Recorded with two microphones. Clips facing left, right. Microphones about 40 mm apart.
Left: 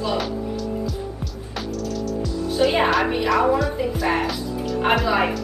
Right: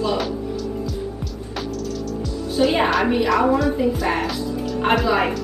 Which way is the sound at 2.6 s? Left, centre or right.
Centre.